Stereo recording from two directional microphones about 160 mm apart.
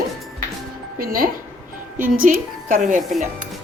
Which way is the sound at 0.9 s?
65° right (ahead or behind).